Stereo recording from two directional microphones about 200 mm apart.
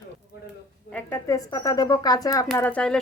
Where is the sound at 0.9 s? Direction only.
10° left (ahead or behind).